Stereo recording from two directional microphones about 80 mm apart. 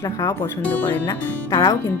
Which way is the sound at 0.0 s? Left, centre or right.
Left.